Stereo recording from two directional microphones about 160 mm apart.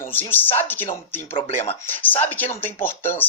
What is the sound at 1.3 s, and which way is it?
Speech, 40° left (ahead or behind).